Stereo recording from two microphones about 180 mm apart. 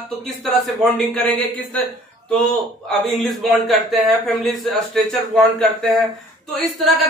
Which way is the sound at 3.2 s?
Centre (ahead or behind).